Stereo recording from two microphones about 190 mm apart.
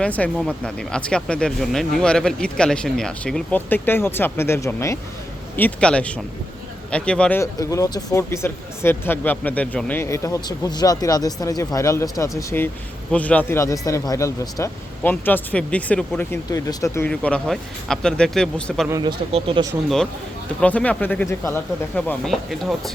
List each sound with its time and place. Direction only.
0.0 s speech: 5° left (ahead or behind)
17.1 s speech: 5° left (ahead or behind)
18.9 s speech: 20° right (ahead or behind)
19.3 s speech: 30° right (ahead or behind)
20.6 s speech: 5° left (ahead or behind)
21.9 s speech: 5° left (ahead or behind)